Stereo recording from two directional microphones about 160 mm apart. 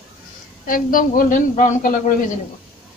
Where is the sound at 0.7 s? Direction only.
60° left (ahead or behind).